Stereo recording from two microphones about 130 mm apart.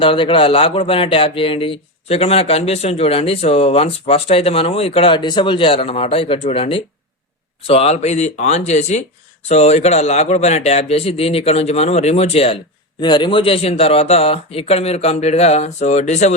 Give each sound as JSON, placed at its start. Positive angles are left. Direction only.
{"t": 0.0, "sound": "a man's voice", "side_deg": 40}
{"t": 13.0, "sound": "speech", "side_deg": 35}